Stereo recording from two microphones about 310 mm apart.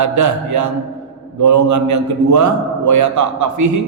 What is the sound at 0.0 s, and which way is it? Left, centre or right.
A man's voice, right.